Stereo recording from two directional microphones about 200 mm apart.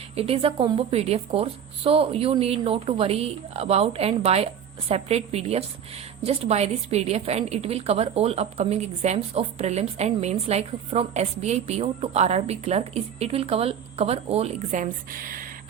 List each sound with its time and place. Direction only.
0.2 s a woman's voice: 30° right (ahead or behind); by 15.7 s 45° right (ahead or behind)